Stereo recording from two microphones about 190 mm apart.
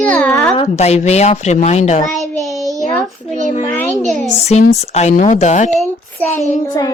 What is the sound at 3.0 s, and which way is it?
Speech, centre (ahead or behind).